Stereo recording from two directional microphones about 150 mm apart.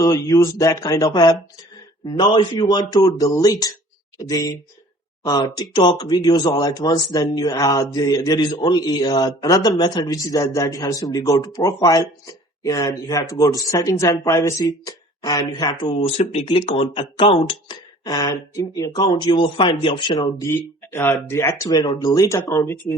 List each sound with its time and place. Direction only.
0.0 s speech: 20° left (ahead or behind)
16.0 s speech: 45° left (ahead or behind); by 22.7 s 20° left (ahead or behind)